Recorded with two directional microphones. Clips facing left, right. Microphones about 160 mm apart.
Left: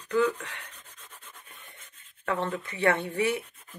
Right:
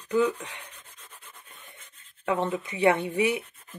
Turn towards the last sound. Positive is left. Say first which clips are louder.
# right 2 dB
turn(degrees=-15)  # may be behind; listen again after turning